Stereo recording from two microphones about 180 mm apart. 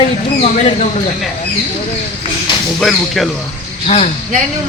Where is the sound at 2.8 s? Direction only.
Centre (ahead or behind).